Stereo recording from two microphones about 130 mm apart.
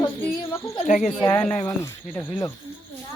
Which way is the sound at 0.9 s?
75° left (ahead or behind).